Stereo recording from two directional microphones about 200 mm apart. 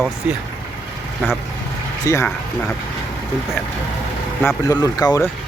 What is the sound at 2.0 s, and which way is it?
Speech, 15° left (ahead or behind).